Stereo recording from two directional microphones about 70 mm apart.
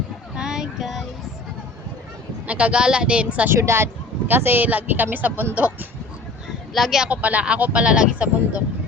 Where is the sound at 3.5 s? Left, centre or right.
Right.